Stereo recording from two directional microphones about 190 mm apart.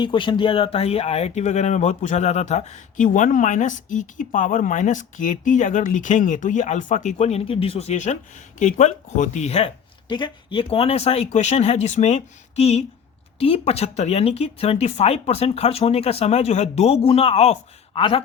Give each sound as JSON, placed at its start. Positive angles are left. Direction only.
{"t": 0.0, "sound": "speech", "side_deg": 25}